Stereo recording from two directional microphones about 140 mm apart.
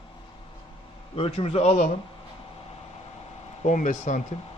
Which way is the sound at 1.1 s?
40° left (ahead or behind).